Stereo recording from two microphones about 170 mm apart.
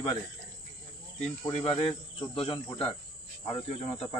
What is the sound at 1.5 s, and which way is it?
Speech, 35° left (ahead or behind).